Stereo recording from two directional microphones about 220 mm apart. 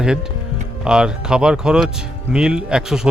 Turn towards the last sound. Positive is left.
turn(degrees=-5)  # may be behind; listen again after turning